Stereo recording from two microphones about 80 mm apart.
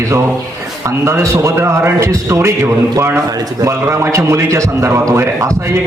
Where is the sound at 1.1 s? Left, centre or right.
Right.